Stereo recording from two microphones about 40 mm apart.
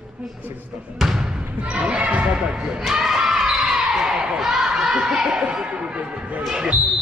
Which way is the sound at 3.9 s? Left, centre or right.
Centre.